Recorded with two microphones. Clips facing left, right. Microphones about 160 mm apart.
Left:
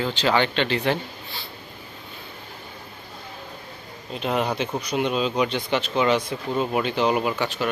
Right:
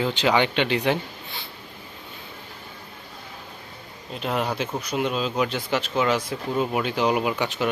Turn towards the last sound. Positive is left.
turn(degrees=-20)  # may be behind; listen again after turning